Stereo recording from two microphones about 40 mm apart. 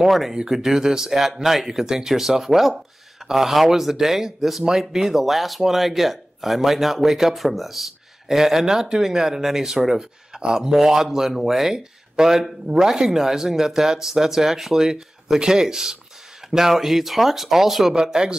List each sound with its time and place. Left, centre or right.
0.0 s speech: centre
17.9 s speech: centre